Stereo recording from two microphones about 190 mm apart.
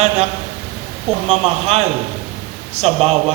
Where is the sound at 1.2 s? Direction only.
35° right (ahead or behind).